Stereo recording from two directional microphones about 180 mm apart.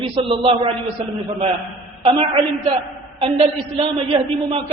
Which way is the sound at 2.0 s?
25° right (ahead or behind).